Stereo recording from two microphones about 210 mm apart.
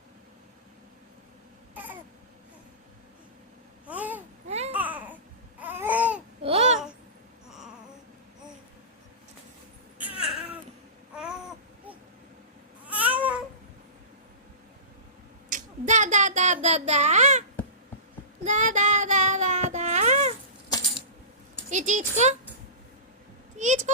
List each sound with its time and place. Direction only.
1.7 s baby cry: 10° right (ahead or behind)
3.8 s babbling: 5° right (ahead or behind)
4.4 s babbling: 30° right (ahead or behind)
4.7 s babbling: 5° right (ahead or behind)
6.4 s babbling: 30° right (ahead or behind)
10.2 s babbling: centre (ahead or behind)
12.8 s babbling: 5° right (ahead or behind)
15.4 s child singing: 35° right (ahead or behind)
18.4 s child singing: 35° right (ahead or behind)
21.7 s a sound: 35° right (ahead or behind)
23.6 s a sound: 35° right (ahead or behind)